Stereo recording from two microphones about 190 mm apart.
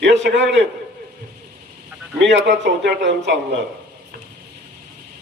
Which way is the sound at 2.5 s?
65° right (ahead or behind).